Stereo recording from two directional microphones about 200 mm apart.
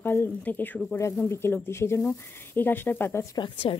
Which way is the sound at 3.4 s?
25° left (ahead or behind).